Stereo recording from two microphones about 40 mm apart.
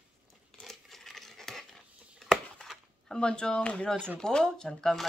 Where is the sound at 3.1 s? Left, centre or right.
Left.